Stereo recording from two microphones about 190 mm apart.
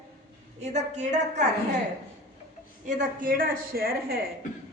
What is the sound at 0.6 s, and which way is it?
Speech, 35° right (ahead or behind).